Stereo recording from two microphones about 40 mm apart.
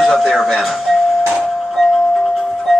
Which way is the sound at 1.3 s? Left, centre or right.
Centre.